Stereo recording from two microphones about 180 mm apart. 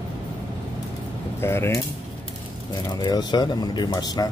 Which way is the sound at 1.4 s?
15° left (ahead or behind).